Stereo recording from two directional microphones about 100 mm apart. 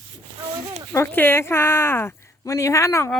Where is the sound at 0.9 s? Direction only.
25° left (ahead or behind).